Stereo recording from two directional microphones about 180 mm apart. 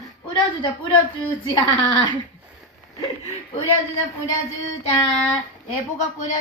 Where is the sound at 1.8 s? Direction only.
25° left (ahead or behind).